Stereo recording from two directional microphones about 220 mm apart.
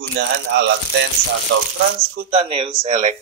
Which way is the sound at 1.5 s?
55° right (ahead or behind).